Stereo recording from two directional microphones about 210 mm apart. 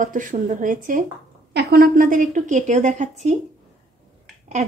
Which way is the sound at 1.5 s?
50° right (ahead or behind).